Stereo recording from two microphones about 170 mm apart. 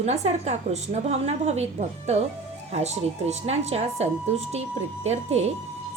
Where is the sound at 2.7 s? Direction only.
40° right (ahead or behind).